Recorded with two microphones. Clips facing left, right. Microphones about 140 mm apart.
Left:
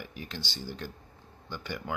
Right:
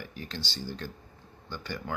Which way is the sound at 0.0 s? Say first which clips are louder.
Right 1 dB; 15° left (ahead or behind).